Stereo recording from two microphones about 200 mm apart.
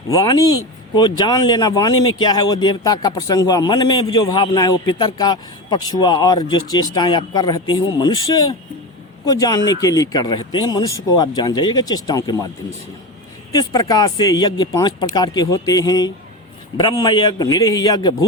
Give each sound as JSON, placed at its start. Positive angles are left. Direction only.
{"t": 0.1, "sound": "speech", "side_deg": 20}
{"t": 13.6, "sound": "speech", "side_deg": 20}